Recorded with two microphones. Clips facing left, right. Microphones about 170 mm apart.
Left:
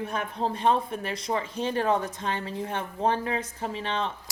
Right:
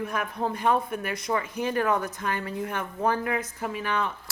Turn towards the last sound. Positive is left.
turn(degrees=25)  # may be behind; listen again after turning